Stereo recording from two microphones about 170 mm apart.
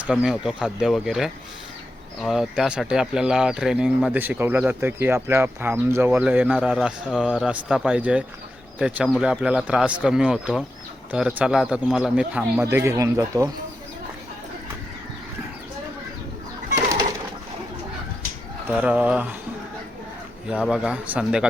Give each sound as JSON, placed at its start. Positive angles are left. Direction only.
{"t": 0.0, "sound": "a man's voice", "side_deg": -5}
{"t": 16.7, "sound": "bird", "side_deg": -20}
{"t": 18.7, "sound": "speech", "side_deg": -5}
{"t": 20.5, "sound": "a man's voice", "side_deg": -5}